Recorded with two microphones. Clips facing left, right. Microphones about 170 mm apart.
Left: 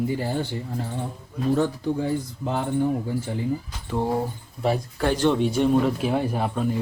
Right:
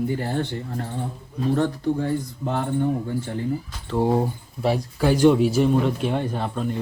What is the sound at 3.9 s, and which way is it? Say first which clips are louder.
Speech: right 4 dB; 5° left (ahead or behind).